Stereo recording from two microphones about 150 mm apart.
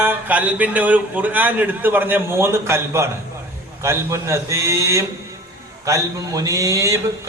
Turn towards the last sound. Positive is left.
turn(degrees=-20)  # may be behind; listen again after turning